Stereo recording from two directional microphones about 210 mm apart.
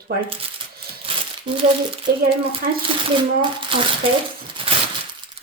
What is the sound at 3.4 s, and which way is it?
Speech, 25° right (ahead or behind).